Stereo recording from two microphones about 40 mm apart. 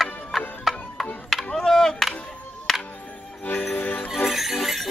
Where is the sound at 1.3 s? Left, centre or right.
Centre.